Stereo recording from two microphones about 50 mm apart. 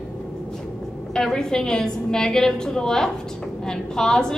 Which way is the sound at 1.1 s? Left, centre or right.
Centre.